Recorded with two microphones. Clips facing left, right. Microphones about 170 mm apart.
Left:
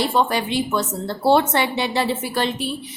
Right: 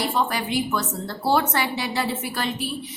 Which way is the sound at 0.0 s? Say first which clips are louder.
Left 4 dB; 25° left (ahead or behind).